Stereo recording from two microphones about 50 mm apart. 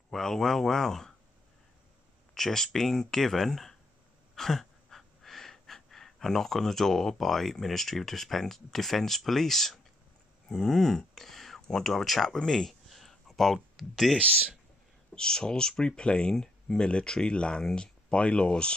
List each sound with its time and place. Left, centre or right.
0.1 s speech: centre
2.3 s speech: centre
4.4 s gasp: centre
10.5 s speech: centre
15.1 s speech: centre